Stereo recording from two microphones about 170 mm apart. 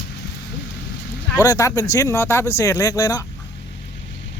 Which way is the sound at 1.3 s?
20° left (ahead or behind).